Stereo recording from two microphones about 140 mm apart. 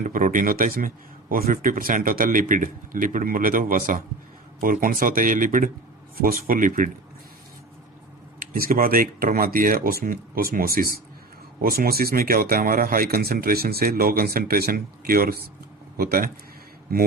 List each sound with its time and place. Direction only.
0.1 s speech: 70° right (ahead or behind)
6.1 s speech: 90° right; by 6.9 s 70° right (ahead or behind)
8.4 s speech: 90° right